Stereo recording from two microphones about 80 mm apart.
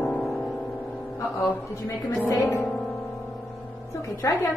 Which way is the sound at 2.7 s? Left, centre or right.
Centre.